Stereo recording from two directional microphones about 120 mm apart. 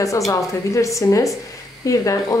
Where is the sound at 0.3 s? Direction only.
25° left (ahead or behind).